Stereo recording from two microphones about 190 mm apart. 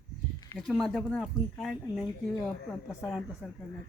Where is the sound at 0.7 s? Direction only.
Centre (ahead or behind).